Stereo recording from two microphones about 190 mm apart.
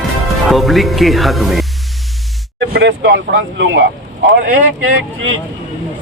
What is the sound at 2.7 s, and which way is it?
Speech, 70° right (ahead or behind).